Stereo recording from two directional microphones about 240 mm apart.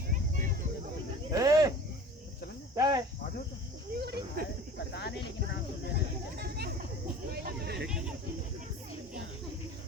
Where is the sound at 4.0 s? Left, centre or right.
Right.